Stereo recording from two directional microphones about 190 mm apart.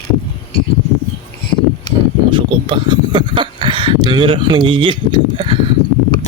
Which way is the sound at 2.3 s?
25° right (ahead or behind).